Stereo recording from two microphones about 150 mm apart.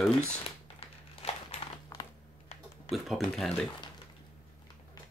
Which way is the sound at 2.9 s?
Centre (ahead or behind).